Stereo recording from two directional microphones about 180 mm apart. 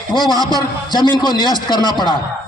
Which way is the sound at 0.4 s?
20° right (ahead or behind).